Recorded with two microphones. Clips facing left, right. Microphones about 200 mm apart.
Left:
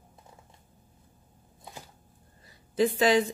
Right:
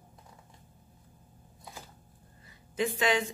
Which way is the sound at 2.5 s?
35° left (ahead or behind).